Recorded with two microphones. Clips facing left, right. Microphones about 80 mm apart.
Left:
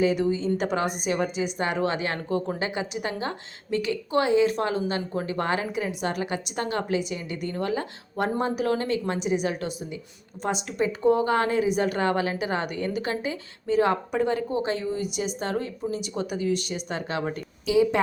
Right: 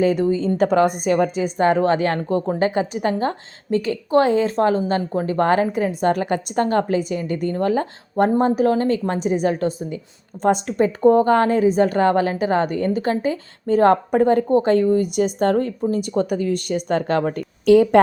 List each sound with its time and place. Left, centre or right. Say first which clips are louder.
0.0 s a woman's voice: right 5 dB; right